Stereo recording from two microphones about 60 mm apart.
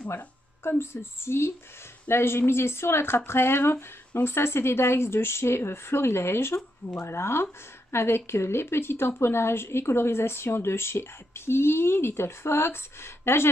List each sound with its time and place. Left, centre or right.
0.7 s a woman's voice: left